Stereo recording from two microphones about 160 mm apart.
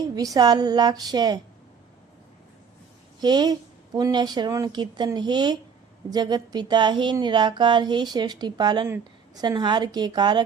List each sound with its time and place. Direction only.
0.3 s speech: 25° right (ahead or behind)
3.2 s speech: 25° right (ahead or behind)